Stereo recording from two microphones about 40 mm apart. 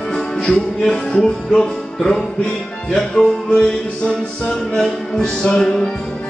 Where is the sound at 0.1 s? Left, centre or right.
Centre.